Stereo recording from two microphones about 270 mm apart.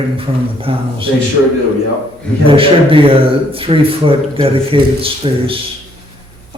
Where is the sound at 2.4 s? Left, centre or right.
Centre.